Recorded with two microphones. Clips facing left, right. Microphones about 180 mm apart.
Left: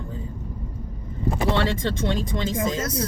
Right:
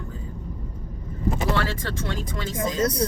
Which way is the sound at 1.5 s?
25° left (ahead or behind).